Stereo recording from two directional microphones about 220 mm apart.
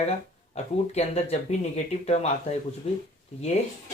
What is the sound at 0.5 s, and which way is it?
Speech, 30° left (ahead or behind).